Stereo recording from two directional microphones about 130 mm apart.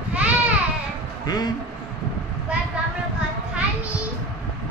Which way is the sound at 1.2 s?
30° left (ahead or behind).